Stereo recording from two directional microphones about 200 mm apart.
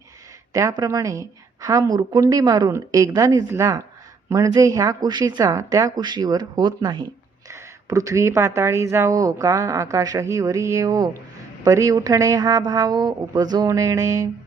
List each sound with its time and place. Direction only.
0.5 s speech: 15° right (ahead or behind)